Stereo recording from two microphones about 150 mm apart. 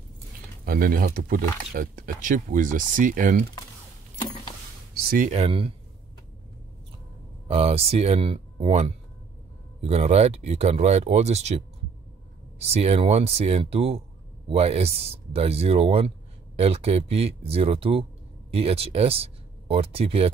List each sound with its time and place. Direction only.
0.7 s speech: 75° right (ahead or behind)
5.3 s speech: 40° right (ahead or behind)
7.4 s speech: 40° right (ahead or behind)